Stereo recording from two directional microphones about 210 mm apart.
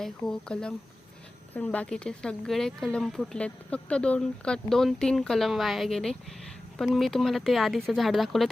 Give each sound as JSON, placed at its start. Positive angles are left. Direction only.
{"t": 0.0, "sound": "speech", "side_deg": 5}